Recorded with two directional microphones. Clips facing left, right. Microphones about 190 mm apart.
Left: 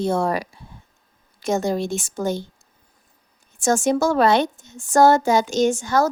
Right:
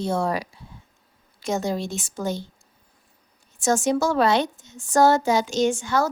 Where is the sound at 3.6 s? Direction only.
50° left (ahead or behind).